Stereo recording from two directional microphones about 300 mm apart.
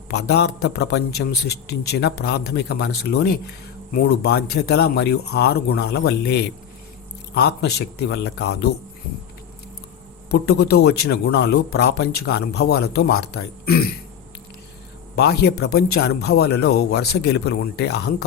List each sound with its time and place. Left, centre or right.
0.1 s a man's voice: left
10.2 s a man's voice: left
15.1 s a man's voice: left